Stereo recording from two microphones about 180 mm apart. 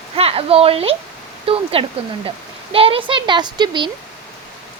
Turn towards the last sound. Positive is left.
turn(degrees=-25)  # may be behind; listen again after turning